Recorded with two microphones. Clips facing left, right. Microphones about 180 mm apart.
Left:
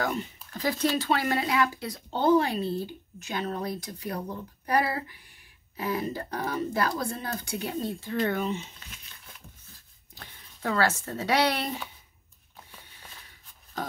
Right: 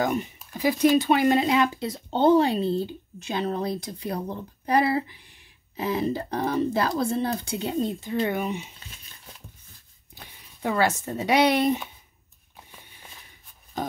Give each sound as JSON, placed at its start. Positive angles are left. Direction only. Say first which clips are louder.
{"t": 0.0, "sound": "speech", "louder": "right 5 dB", "side_deg": -15}
{"t": 8.7, "sound": "crumpling", "louder": "right 1 dB", "side_deg": -30}
{"t": 10.1, "sound": "speech", "louder": "right 1 dB", "side_deg": -10}
{"t": 12.7, "sound": "a sound", "louder": "right 1 dB", "side_deg": -15}